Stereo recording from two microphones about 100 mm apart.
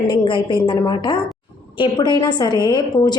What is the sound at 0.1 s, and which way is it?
A woman's voice, 55° left (ahead or behind).